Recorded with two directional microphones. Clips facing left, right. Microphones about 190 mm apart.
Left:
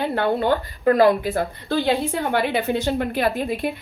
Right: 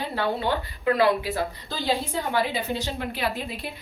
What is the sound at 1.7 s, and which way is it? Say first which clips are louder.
Speech: left 9 dB; 60° left (ahead or behind).